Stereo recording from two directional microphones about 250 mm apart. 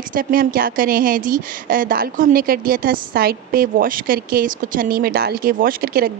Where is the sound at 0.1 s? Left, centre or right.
Right.